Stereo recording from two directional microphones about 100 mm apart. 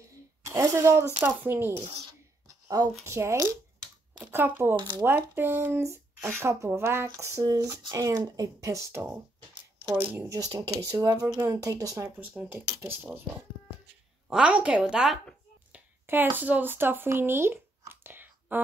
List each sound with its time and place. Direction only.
0.4 s speech: 30° right (ahead or behind)
2.4 s a sound: 40° right (ahead or behind)
3.1 s speech: 30° right (ahead or behind)
4.7 s speech: 50° right (ahead or behind)
5.0 s speech: 20° right (ahead or behind)
10.0 s speech: 25° right (ahead or behind)
10.5 s speech: 40° right (ahead or behind)
12.2 s speech: 20° right (ahead or behind)
14.3 s a woman's voice: 10° right (ahead or behind)
15.7 s a sound: 20° right (ahead or behind)